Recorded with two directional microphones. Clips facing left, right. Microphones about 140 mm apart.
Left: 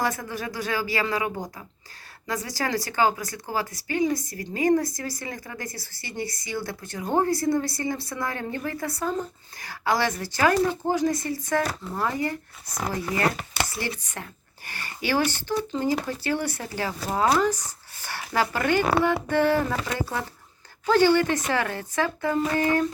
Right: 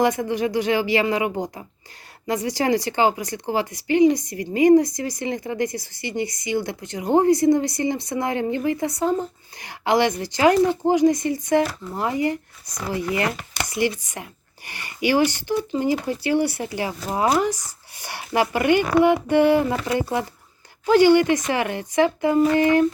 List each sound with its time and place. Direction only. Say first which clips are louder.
0.0 s speech: right 8 dB; 20° right (ahead or behind)
13.7 s speech: right 9 dB; 15° right (ahead or behind)